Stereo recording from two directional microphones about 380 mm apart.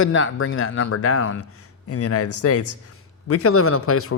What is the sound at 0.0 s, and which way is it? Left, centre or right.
Speech, left.